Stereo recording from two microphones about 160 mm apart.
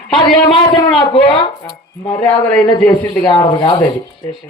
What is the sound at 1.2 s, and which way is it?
Speech, 35° left (ahead or behind).